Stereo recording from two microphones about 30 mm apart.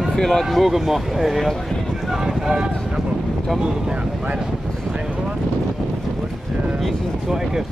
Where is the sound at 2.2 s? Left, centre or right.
Centre.